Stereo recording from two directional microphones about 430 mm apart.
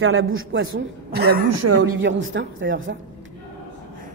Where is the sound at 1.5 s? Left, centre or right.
Right.